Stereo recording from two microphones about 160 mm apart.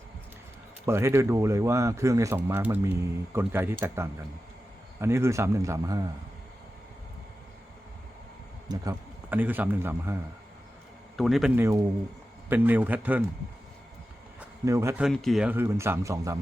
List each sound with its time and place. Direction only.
0.9 s speech: 15° right (ahead or behind)
8.7 s speech: 20° right (ahead or behind)
9.3 s speech: 10° right (ahead or behind)
11.2 s speech: centre (ahead or behind)
11.5 s speech: 15° right (ahead or behind)
14.6 s speech: 20° right (ahead or behind)
15.0 s speech: centre (ahead or behind)
15.5 s speech: 15° right (ahead or behind)